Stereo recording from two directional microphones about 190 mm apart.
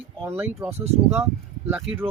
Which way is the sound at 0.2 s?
10° right (ahead or behind).